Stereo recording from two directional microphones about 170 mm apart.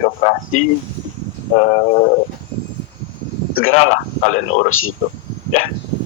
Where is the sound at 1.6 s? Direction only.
45° left (ahead or behind).